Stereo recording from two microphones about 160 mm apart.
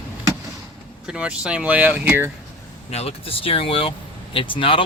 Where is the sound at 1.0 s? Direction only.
5° right (ahead or behind).